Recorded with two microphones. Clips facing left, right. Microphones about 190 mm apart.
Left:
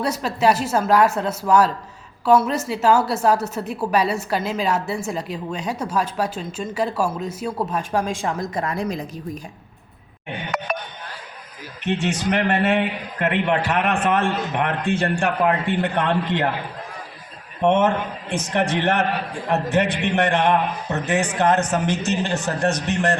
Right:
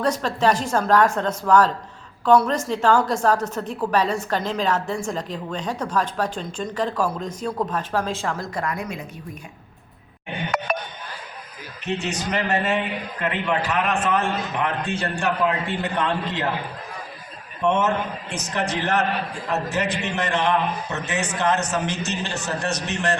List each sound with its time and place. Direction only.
0.0 s a woman's voice: 10° left (ahead or behind); by 9.0 s 30° left (ahead or behind)
10.7 s music: 50° right (ahead or behind)
12.0 s a man's voice: 55° left (ahead or behind)
17.6 s a man's voice: 55° left (ahead or behind)